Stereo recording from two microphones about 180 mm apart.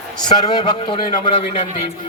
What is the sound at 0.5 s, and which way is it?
A man's voice, 25° left (ahead or behind).